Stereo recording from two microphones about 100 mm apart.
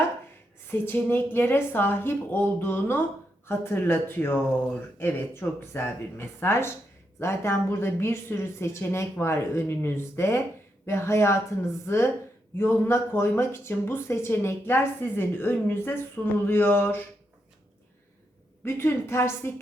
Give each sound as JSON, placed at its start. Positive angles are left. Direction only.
{"t": 0.7, "sound": "speech", "side_deg": 20}
{"t": 18.6, "sound": "speech", "side_deg": 25}